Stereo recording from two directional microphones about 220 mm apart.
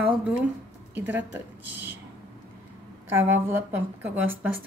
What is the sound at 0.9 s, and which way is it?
Speech, 10° right (ahead or behind).